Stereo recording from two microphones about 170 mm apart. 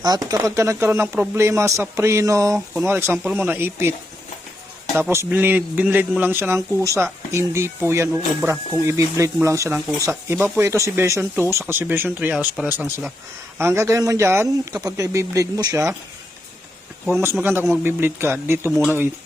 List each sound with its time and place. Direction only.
0.3 s a man's voice: 20° right (ahead or behind)
4.9 s a man's voice: 15° right (ahead or behind)
17.4 s a man's voice: 15° right (ahead or behind)